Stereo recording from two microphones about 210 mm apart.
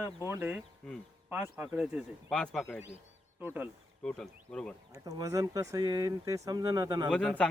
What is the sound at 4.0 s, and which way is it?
Speech, 5° left (ahead or behind).